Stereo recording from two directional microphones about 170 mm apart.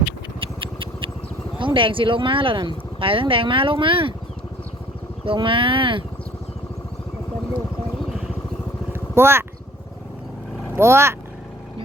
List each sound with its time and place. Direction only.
0.3 s vehicle: 30° right (ahead or behind)
1.5 s speech: 30° right (ahead or behind)
5.2 s speech: 30° right (ahead or behind)
8.9 s vehicle: 15° right (ahead or behind)
10.8 s speech: 15° right (ahead or behind)